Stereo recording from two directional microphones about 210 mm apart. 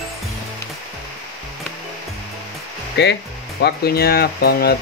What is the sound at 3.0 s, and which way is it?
Speech, 55° left (ahead or behind).